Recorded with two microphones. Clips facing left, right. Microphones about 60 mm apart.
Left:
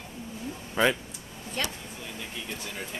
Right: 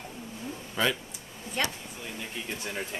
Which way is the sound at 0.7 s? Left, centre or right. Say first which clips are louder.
Left 4 dB; left.